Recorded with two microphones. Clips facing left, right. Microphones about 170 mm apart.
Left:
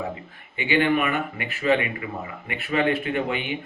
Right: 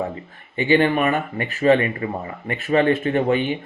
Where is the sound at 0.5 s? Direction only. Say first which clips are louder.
Right 4 dB; 45° right (ahead or behind).